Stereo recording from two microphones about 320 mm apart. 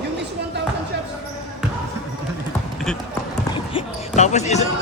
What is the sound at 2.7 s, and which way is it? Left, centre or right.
Basketball bounce, centre.